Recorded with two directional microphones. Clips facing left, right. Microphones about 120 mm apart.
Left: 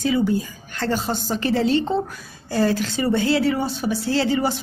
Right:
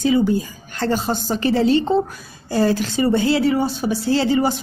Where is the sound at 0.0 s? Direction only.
25° right (ahead or behind).